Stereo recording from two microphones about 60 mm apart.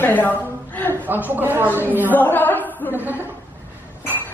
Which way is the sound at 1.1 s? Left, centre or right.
Right.